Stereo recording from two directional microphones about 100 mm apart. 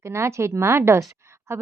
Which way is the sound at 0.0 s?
30° right (ahead or behind).